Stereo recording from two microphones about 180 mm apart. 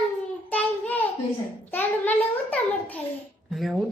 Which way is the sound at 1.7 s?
10° left (ahead or behind).